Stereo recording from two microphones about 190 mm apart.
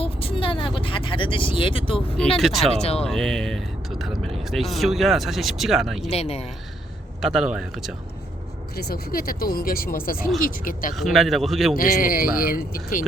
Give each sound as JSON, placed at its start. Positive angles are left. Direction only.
{"t": 0.0, "sound": "vehicle", "side_deg": 30}
{"t": 2.7, "sound": "speech", "side_deg": 35}
{"t": 3.1, "sound": "speech", "side_deg": 0}
{"t": 6.1, "sound": "speech", "side_deg": 35}
{"t": 7.2, "sound": "speech", "side_deg": -5}
{"t": 8.7, "sound": "speech", "side_deg": 55}
{"t": 10.9, "sound": "speech", "side_deg": 0}
{"t": 11.8, "sound": "speech", "side_deg": 50}